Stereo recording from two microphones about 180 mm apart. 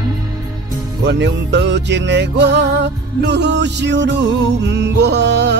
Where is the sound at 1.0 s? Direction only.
75° right (ahead or behind).